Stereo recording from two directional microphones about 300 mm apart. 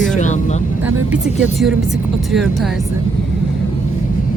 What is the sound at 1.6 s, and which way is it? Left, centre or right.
Speech, centre.